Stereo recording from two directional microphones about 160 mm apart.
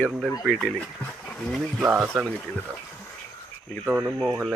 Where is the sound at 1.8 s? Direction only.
10° right (ahead or behind).